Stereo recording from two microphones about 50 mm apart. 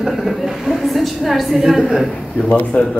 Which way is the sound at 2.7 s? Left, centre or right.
Left.